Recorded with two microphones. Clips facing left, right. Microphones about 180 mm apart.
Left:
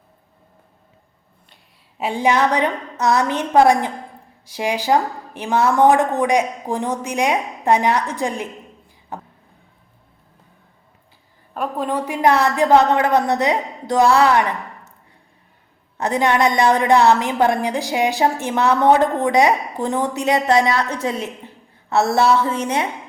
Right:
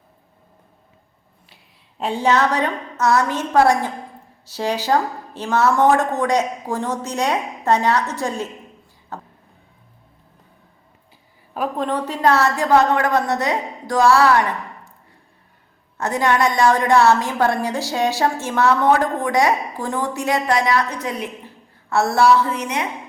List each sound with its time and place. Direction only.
2.0 s a woman's voice: 10° left (ahead or behind)
9.1 s music: 15° left (ahead or behind)
11.5 s a woman's voice: centre (ahead or behind)
11.9 s a woman's voice: 10° left (ahead or behind)
16.0 s a woman's voice: 20° left (ahead or behind)